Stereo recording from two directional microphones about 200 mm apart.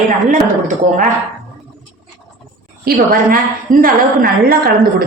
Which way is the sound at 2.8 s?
45° right (ahead or behind).